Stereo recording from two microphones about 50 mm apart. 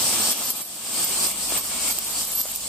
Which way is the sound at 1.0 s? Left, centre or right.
Centre.